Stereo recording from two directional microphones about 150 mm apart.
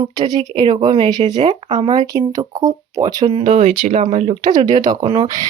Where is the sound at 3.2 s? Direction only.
40° right (ahead or behind).